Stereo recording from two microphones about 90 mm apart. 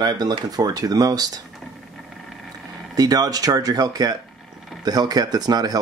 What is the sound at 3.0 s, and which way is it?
Speech, 45° right (ahead or behind).